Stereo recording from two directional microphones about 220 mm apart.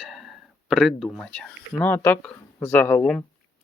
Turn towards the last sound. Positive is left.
turn(degrees=5)  # may be behind; listen again after turning